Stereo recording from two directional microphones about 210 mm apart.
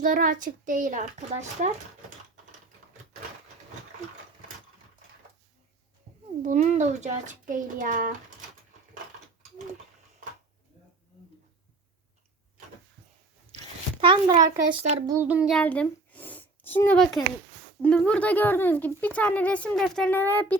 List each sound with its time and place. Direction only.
0.0 s a child's voice: 40° right (ahead or behind)
6.4 s a child's voice: 35° right (ahead or behind)
14.0 s a child's voice: 20° right (ahead or behind)
15.1 s a child's voice: 10° right (ahead or behind); by 20.6 s 10° left (ahead or behind)